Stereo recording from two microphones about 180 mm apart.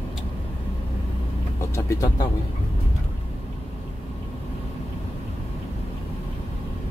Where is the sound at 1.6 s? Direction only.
20° left (ahead or behind).